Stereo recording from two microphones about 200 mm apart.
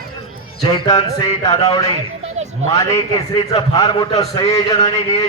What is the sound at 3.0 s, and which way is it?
A man's voice, 20° left (ahead or behind).